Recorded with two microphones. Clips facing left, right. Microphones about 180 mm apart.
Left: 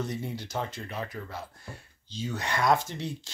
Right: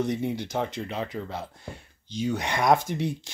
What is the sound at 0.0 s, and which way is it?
Speech, 15° right (ahead or behind).